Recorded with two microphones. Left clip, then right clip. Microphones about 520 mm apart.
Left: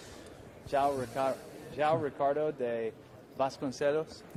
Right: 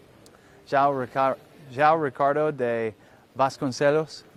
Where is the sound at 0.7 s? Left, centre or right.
Right.